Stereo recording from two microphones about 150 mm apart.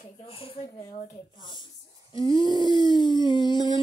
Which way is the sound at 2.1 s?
35° left (ahead or behind).